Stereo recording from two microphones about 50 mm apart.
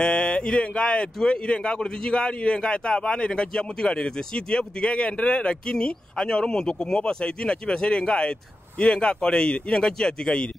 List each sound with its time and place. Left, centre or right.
0.0 s speech: centre